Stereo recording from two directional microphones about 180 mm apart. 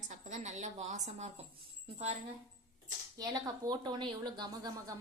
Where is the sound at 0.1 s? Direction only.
40° right (ahead or behind).